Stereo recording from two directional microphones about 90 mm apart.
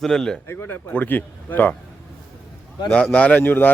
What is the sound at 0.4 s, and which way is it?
Speech, 25° left (ahead or behind).